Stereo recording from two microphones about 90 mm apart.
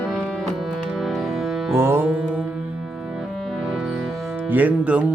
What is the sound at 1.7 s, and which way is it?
Music, 25° right (ahead or behind).